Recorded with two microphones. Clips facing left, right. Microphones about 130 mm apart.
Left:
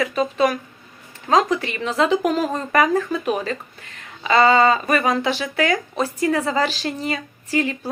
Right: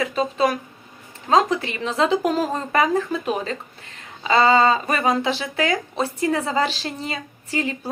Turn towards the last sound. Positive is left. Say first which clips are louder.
# left 3 dB
turn(degrees=-25)  # may be behind; listen again after turning